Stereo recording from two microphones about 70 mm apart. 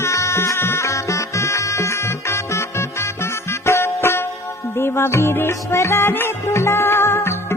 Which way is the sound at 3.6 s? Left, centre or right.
Left.